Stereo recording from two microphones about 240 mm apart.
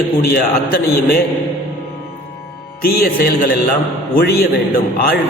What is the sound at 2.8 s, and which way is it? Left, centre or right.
A man's voice, left.